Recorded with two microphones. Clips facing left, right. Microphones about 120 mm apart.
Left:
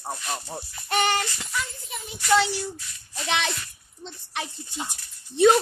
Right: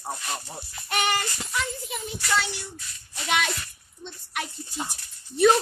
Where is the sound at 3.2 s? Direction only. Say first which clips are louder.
Right 1 dB; 30° left (ahead or behind).